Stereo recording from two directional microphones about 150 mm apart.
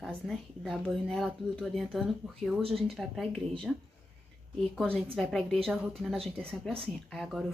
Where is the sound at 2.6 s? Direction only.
40° right (ahead or behind).